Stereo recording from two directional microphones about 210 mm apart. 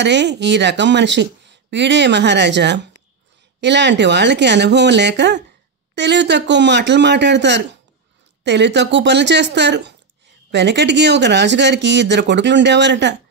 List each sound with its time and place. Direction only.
0.0 s speech: 55° right (ahead or behind)